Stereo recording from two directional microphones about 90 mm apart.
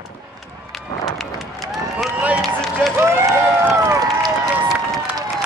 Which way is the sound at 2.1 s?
15° right (ahead or behind).